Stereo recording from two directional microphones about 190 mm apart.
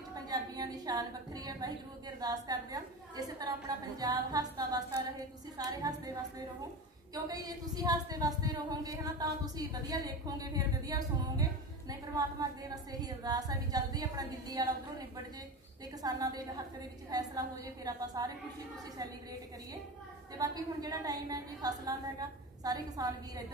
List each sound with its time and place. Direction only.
0.1 s a woman's voice: 20° right (ahead or behind)
7.2 s a woman's voice: 20° right (ahead or behind)
20.3 s a woman's voice: 20° right (ahead or behind)